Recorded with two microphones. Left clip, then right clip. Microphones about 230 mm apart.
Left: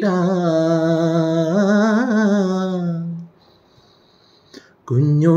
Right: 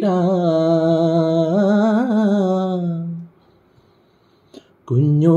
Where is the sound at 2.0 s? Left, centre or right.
Right.